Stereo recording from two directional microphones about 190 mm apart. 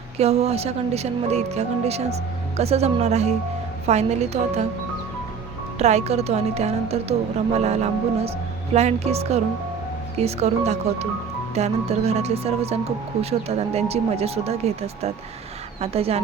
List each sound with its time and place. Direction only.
0.2 s speech: 35° right (ahead or behind)
5.8 s speech: 35° right (ahead or behind)